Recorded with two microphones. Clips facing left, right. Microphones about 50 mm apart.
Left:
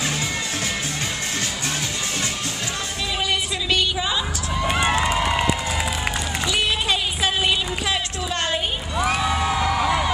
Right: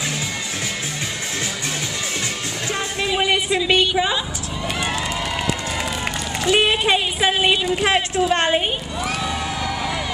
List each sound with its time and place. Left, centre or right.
3.1 s music: right
4.6 s run: left
6.4 s a sound: right
7.8 s a woman's voice: right
9.0 s crowd: centre